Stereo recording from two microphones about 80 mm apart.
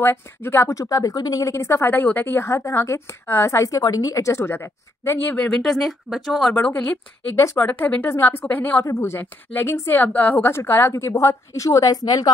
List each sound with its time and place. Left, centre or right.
0.0 s speech: left
2.4 s speech: left
5.5 s speech: centre
6.5 s speech: left
8.8 s speech: left